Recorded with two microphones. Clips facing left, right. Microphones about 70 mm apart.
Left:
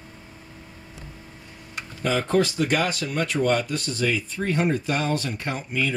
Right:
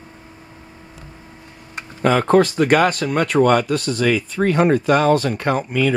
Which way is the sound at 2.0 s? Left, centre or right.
Right.